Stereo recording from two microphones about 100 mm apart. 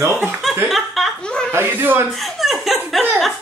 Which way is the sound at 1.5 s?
20° right (ahead or behind).